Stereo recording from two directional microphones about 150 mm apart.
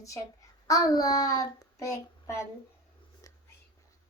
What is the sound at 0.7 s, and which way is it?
Speech, 25° left (ahead or behind).